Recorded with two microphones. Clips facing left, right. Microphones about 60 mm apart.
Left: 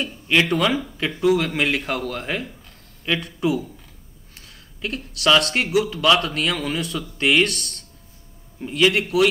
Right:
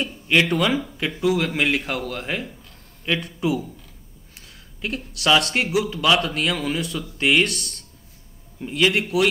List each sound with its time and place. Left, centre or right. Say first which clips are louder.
0.0 s speech: even; centre
0.8 s a sound: left 1 dB; centre
1.2 s speech: left 2 dB; centre